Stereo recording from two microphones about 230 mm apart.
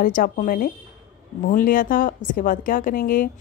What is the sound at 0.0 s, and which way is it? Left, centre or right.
A woman's voice, left.